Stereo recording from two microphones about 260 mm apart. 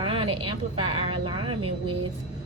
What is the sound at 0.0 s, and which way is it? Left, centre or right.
A woman's voice, centre.